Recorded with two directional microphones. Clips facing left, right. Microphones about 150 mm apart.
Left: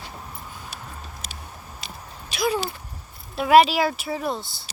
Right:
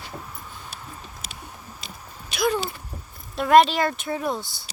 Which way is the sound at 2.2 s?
Centre (ahead or behind).